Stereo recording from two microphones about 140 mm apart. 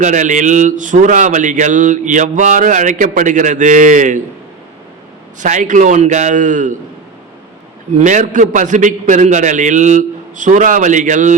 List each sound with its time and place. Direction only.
0.0 s speech: 60° right (ahead or behind)
5.4 s speech: 65° right (ahead or behind)
7.9 s speech: 60° right (ahead or behind)